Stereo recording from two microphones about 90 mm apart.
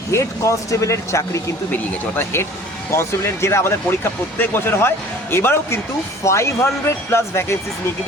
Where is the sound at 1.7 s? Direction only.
25° left (ahead or behind).